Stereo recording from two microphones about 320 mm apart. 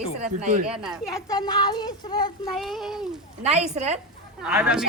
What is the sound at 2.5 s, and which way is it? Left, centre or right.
Speech, centre.